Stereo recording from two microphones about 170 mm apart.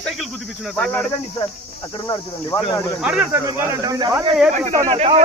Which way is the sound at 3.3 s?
20° right (ahead or behind).